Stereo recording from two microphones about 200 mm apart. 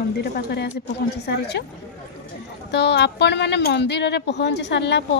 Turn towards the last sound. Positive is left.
turn(degrees=60)  # may be behind; listen again after turning